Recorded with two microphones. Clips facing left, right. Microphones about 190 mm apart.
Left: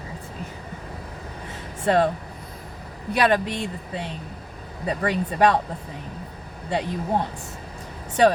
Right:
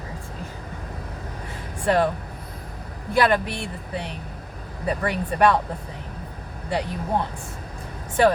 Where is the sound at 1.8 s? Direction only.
25° left (ahead or behind).